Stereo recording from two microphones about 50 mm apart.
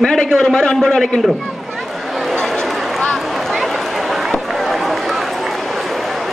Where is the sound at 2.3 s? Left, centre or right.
Centre.